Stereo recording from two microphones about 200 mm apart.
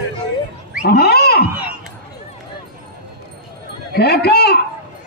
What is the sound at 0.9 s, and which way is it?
Wild animals, 50° left (ahead or behind).